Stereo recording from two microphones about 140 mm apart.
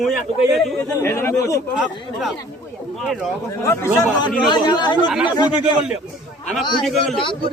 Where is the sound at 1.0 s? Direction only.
15° left (ahead or behind).